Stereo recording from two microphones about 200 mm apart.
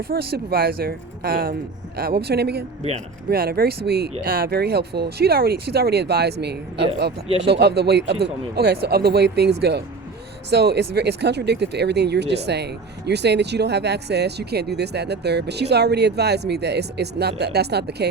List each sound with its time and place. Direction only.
0.1 s speech: 50° right (ahead or behind)